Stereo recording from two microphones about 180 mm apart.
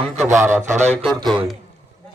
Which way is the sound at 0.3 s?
15° right (ahead or behind).